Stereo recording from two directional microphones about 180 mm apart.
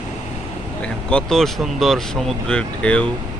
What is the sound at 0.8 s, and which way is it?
Speech, 5° left (ahead or behind).